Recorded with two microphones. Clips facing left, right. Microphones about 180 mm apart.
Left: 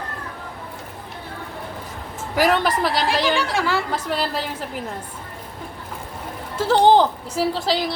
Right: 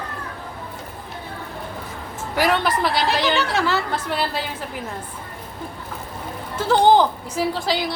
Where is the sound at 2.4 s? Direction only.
45° left (ahead or behind).